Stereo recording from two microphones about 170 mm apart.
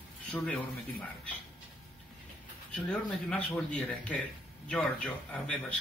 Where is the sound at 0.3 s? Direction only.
10° left (ahead or behind).